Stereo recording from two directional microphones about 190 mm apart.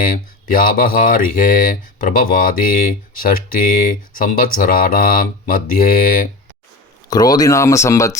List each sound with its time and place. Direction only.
0.0 s mantra: 45° left (ahead or behind)
7.1 s speech: 20° left (ahead or behind)